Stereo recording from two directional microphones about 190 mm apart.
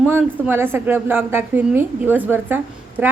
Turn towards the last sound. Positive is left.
turn(degrees=-10)  # may be behind; listen again after turning